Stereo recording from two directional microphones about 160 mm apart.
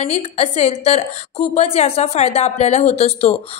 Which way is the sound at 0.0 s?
40° left (ahead or behind).